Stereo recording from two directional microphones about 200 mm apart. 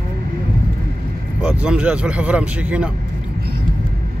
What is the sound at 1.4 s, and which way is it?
Speech, 5° right (ahead or behind).